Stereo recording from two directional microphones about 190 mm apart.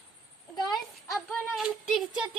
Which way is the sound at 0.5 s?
20° left (ahead or behind).